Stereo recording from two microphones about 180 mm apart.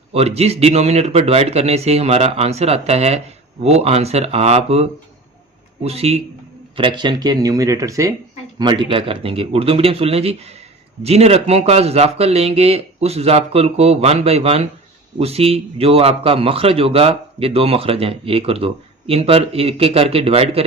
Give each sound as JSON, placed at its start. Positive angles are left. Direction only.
{"t": 0.1, "sound": "a man's voice", "side_deg": -35}